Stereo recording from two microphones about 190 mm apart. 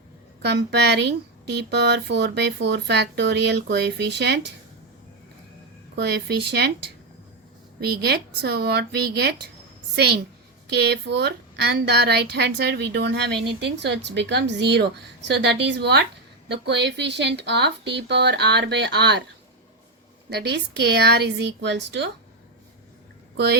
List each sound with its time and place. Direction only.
0.4 s a woman's voice: 60° right (ahead or behind)
6.0 s a woman's voice: 60° right (ahead or behind)
7.8 s a woman's voice: 55° right (ahead or behind)
20.3 s a woman's voice: 60° right (ahead or behind)